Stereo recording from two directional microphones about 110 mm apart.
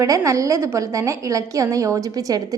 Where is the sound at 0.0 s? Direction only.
30° right (ahead or behind).